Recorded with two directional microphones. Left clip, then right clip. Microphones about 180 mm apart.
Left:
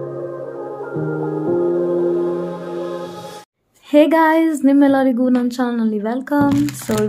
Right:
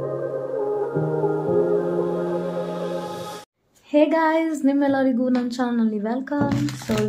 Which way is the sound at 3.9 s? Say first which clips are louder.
Left 6 dB; 40° left (ahead or behind).